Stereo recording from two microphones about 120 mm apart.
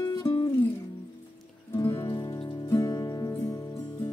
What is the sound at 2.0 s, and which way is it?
Music, 30° left (ahead or behind).